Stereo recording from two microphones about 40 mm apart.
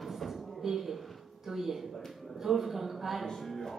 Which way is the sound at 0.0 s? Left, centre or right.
Centre.